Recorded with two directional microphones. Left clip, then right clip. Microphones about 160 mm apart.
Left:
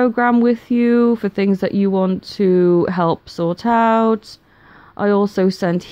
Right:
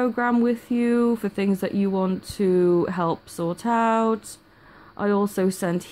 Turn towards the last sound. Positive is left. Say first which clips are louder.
# left 7 dB
turn(degrees=40)  # may be behind; listen again after turning